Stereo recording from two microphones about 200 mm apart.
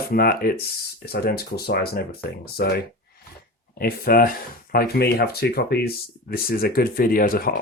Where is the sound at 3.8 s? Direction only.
45° left (ahead or behind).